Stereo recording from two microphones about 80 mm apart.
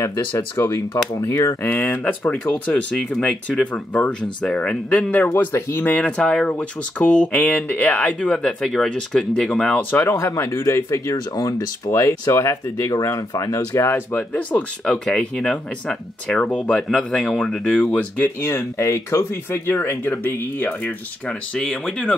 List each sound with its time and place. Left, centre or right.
0.0 s speech: left
1.6 s speech: left
2.7 s speech: centre
5.3 s speech: left
8.5 s speech: centre
9.8 s speech: left
11.3 s speech: left
19.6 s speech: left
21.3 s speech: centre